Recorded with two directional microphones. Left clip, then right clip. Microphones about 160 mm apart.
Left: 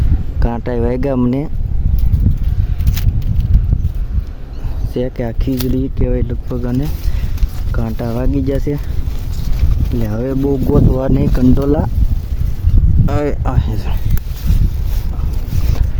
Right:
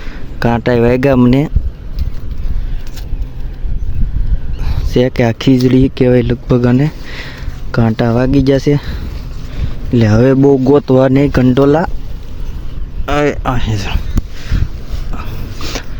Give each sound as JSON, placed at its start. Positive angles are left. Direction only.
{"t": 0.3, "sound": "speech", "side_deg": -15}
{"t": 4.9, "sound": "speech", "side_deg": -25}
{"t": 5.4, "sound": "speech", "side_deg": -40}
{"t": 10.0, "sound": "speech", "side_deg": -40}
{"t": 13.1, "sound": "speech", "side_deg": -5}